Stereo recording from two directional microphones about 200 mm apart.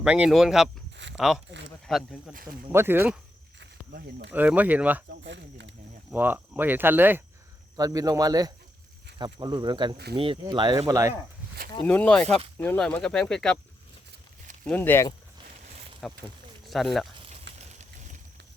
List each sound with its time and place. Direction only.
0.0 s speech: 5° right (ahead or behind)
1.0 s a sound: 65° right (ahead or behind)
1.9 s speech: centre (ahead or behind)
3.6 s snake: 60° right (ahead or behind)
4.3 s speech: 5° right (ahead or behind)
5.1 s speech: 60° right (ahead or behind)
6.1 s speech: 10° right (ahead or behind)
11.8 s speech: 5° left (ahead or behind)
14.6 s speech: 10° left (ahead or behind)
16.0 s speech: centre (ahead or behind)
17.2 s a sound: 30° right (ahead or behind)
17.6 s boat: 35° right (ahead or behind)